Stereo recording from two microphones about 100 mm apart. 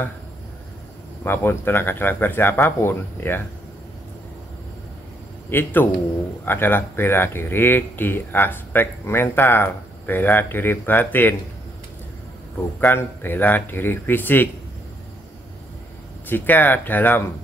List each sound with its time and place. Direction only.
1.2 s speech: 20° left (ahead or behind)
5.5 s speech: 20° left (ahead or behind)
12.8 s speech: 20° left (ahead or behind)
16.3 s speech: 20° left (ahead or behind)